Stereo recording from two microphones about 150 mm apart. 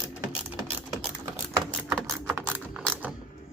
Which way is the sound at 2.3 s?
10° right (ahead or behind).